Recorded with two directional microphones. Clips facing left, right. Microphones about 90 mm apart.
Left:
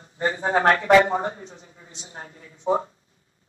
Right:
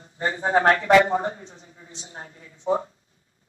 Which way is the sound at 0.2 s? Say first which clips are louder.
Even; 35° left (ahead or behind).